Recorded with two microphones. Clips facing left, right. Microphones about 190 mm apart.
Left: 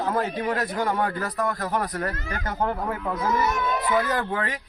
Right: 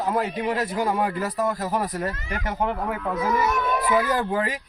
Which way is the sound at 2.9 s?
5° right (ahead or behind).